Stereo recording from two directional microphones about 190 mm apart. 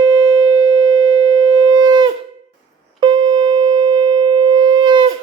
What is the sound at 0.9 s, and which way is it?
Siren, 90° right.